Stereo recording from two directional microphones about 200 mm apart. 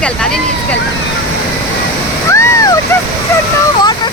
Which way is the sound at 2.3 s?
15° left (ahead or behind).